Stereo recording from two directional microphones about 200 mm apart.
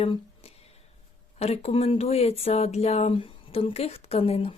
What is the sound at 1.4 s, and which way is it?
Speech, 30° left (ahead or behind).